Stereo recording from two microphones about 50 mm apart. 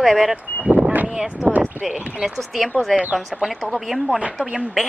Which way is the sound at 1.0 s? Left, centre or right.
Centre.